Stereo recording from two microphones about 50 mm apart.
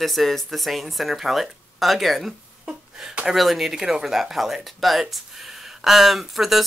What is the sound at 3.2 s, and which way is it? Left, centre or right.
Speech, centre.